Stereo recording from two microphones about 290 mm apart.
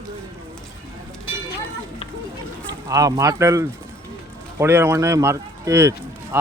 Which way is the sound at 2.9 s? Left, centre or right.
Centre.